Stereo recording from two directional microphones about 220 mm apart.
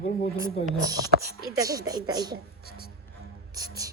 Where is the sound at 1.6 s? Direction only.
15° right (ahead or behind).